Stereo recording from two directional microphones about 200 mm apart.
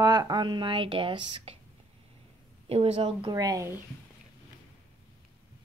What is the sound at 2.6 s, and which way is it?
Speech, 30° right (ahead or behind).